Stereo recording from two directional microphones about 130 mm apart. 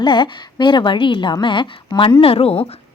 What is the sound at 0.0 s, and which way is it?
A woman's voice, 35° left (ahead or behind).